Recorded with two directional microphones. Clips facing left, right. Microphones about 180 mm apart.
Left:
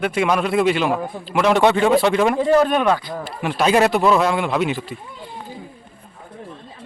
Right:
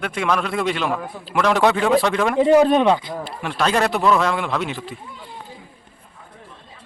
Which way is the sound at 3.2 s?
10° left (ahead or behind).